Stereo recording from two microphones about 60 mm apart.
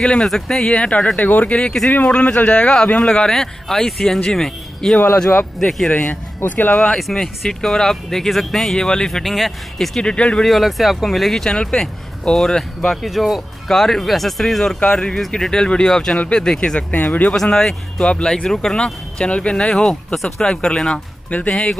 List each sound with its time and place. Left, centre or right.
0.0 s speech: centre
5.9 s speech: left
6.7 s speech: centre
10.0 s speech: centre
10.4 s speech: centre
16.9 s speech: left
17.3 s speech: centre